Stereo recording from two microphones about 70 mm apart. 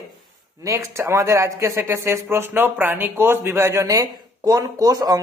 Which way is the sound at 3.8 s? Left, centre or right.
Right.